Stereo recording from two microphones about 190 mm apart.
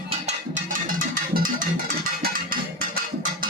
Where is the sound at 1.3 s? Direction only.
45° right (ahead or behind).